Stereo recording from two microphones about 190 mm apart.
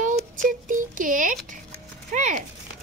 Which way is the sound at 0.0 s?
45° right (ahead or behind).